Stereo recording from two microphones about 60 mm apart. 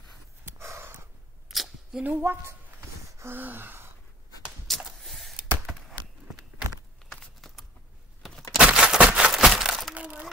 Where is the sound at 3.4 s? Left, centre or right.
Right.